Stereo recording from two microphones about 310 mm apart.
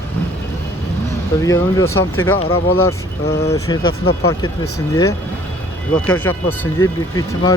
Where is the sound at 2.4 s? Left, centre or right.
Left.